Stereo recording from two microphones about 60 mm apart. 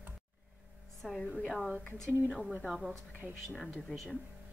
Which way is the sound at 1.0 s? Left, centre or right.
Centre.